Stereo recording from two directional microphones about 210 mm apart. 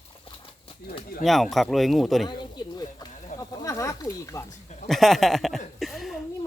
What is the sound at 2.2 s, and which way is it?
Speech, 20° left (ahead or behind).